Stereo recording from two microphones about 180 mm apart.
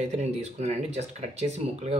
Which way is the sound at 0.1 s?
40° right (ahead or behind).